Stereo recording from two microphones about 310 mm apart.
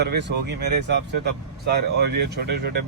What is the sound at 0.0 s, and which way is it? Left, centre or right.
Speech, right.